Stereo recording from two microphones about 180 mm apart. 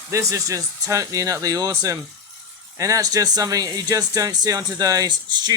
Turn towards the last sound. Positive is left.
turn(degrees=-25)  # may be behind; listen again after turning